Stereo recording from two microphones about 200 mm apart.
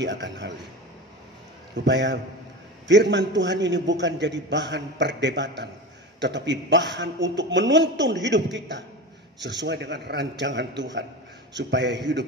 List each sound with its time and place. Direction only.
0.0 s a man's voice: 60° right (ahead or behind)
1.9 s a man's voice: 60° right (ahead or behind)